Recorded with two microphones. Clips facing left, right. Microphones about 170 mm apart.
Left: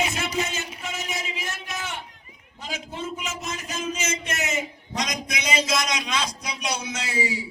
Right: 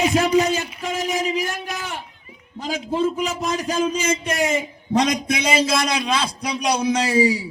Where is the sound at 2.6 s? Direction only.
35° right (ahead or behind).